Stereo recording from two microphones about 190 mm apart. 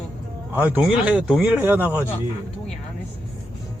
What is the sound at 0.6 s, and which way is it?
Speech, 10° right (ahead or behind).